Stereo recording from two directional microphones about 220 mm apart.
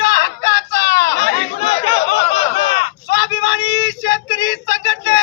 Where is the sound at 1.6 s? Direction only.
25° left (ahead or behind).